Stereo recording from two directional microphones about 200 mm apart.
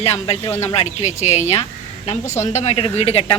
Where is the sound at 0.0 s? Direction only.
30° left (ahead or behind).